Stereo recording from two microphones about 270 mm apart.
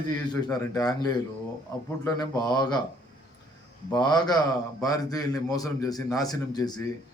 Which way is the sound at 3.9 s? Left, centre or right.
Centre.